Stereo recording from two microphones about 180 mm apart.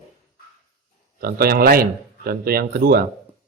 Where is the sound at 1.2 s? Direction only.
55° right (ahead or behind).